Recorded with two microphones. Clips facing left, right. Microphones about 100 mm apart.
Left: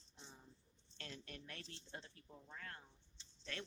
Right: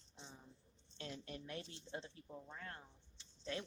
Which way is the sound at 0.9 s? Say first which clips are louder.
Right 5 dB; 20° right (ahead or behind).